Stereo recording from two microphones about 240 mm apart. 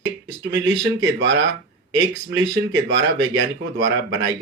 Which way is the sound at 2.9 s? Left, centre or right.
Right.